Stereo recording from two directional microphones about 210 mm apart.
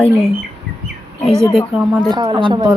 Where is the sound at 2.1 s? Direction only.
20° right (ahead or behind).